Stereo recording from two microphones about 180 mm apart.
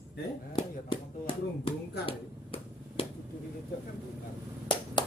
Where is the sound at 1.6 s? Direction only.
30° left (ahead or behind).